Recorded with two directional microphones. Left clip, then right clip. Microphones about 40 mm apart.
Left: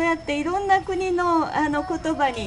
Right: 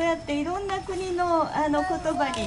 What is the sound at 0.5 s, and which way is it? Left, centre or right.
A woman's voice, centre.